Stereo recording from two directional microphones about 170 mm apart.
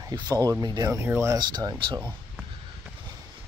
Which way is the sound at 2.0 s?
10° right (ahead or behind).